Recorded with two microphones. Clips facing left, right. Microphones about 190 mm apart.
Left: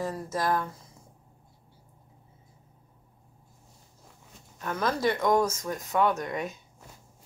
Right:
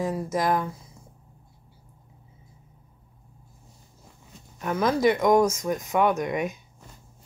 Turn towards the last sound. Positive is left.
turn(degrees=-15)  # may be behind; listen again after turning